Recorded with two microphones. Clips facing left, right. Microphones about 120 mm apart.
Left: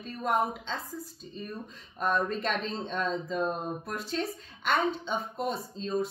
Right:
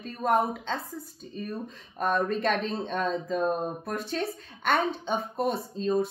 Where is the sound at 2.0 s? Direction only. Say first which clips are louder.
Right 2 dB; 55° right (ahead or behind).